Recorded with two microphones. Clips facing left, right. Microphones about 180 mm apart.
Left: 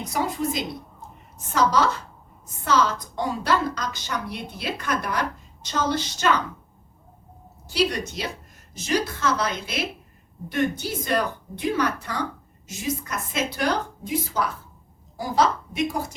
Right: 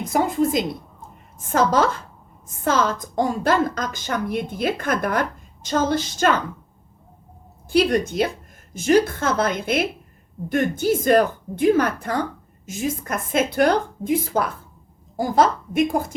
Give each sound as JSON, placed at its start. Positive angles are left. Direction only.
{"t": 0.0, "sound": "a woman's voice", "side_deg": -50}
{"t": 7.7, "sound": "a woman's voice", "side_deg": -50}